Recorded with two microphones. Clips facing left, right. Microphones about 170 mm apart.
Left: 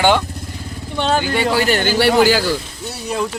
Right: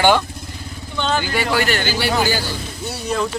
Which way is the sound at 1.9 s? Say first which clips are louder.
Left 10 dB; 75° left (ahead or behind).